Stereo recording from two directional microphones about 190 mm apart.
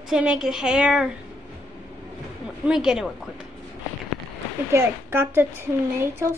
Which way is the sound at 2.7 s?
5° right (ahead or behind).